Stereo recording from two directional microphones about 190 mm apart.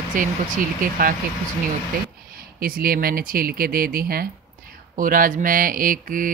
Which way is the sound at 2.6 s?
50° right (ahead or behind).